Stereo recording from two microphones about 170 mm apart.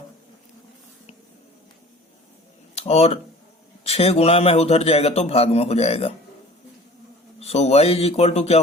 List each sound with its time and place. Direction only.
2.7 s a man's voice: 35° left (ahead or behind)
7.3 s a man's voice: 35° left (ahead or behind)